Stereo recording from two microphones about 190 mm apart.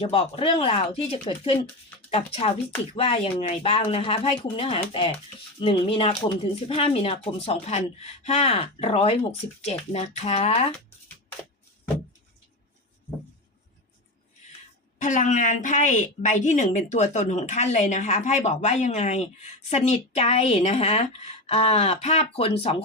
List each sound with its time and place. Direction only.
0.0 s a woman's voice: 30° left (ahead or behind)
15.0 s a woman's voice: 40° left (ahead or behind)